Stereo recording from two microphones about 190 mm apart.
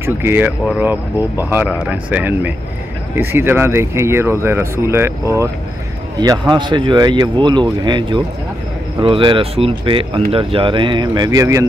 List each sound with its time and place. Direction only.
0.0 s speech: 10° right (ahead or behind)